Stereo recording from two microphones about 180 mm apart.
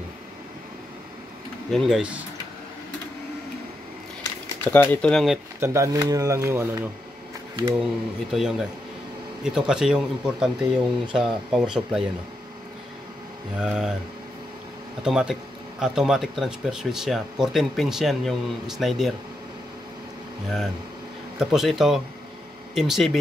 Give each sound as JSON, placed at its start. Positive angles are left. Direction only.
{"t": 1.7, "sound": "speech", "side_deg": 0}
{"t": 4.6, "sound": "speech", "side_deg": 10}
{"t": 5.6, "sound": "speech", "side_deg": -15}
{"t": 8.3, "sound": "speech", "side_deg": 0}
{"t": 13.6, "sound": "speech", "side_deg": -5}
{"t": 15.0, "sound": "speech", "side_deg": -5}
{"t": 21.4, "sound": "speech", "side_deg": 0}